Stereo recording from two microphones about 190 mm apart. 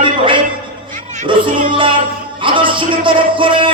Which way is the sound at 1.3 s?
25° right (ahead or behind).